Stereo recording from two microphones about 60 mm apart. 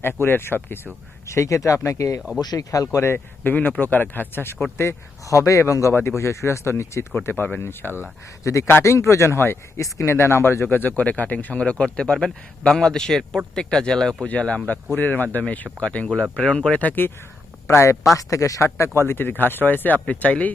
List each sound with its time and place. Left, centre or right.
0.0 s speech: left
1.3 s a man's voice: left
2.5 s speech: left
3.4 s speech: left
4.8 s a man's voice: left
5.9 s speech: left
6.1 s speech: left
7.3 s speech: left
8.4 s a man's voice: left; by 16.8 s centre
16.8 s speech: left
17.7 s a man's voice: left
18.2 s speech: left